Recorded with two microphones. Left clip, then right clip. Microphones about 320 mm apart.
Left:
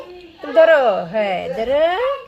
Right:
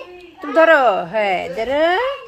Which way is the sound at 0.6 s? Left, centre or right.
Centre.